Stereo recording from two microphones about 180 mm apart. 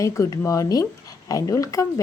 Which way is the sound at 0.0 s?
15° left (ahead or behind).